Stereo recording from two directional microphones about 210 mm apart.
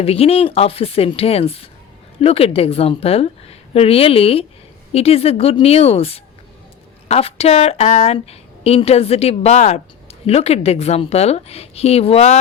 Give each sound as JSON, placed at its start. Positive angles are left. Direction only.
{"t": 0.0, "sound": "a woman's voice", "side_deg": 30}